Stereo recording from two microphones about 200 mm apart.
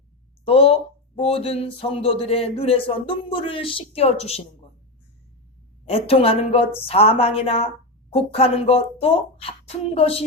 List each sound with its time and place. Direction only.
0.4 s speech: 30° left (ahead or behind)
5.9 s speech: 30° left (ahead or behind)